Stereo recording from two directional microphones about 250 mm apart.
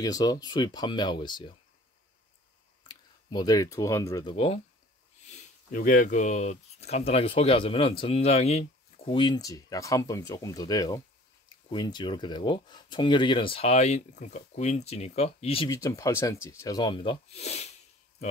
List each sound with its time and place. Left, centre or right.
0.0 s speech: centre
2.9 s speech: centre